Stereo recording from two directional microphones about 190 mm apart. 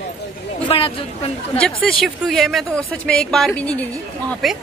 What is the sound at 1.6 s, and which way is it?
A woman's voice, 5° left (ahead or behind).